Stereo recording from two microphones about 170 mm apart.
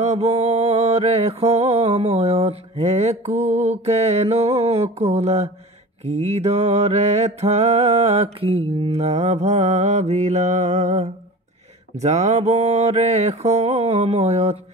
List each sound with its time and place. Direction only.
0.0 s mantra: 40° right (ahead or behind)